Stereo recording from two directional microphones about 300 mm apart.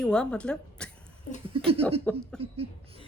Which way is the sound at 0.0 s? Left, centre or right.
Centre.